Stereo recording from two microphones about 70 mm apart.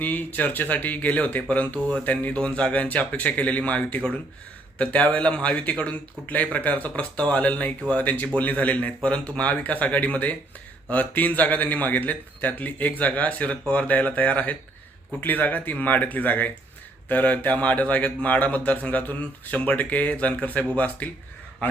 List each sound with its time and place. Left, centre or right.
0.0 s speech: left